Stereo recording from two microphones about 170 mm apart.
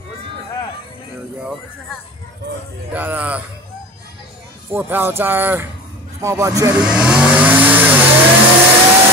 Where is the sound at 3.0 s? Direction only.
10° right (ahead or behind).